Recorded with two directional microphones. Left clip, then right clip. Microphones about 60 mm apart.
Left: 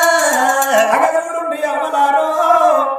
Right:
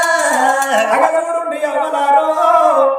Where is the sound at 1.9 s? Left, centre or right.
Right.